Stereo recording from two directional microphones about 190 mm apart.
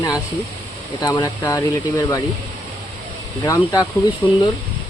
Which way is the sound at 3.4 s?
15° left (ahead or behind).